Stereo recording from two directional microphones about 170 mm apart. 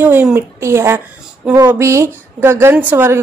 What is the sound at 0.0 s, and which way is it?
A woman's voice, 10° right (ahead or behind).